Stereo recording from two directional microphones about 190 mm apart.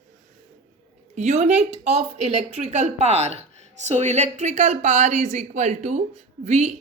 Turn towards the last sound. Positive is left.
turn(degrees=-35)  # may be behind; listen again after turning